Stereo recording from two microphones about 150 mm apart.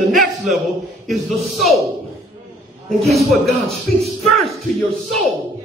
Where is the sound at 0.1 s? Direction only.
Centre (ahead or behind).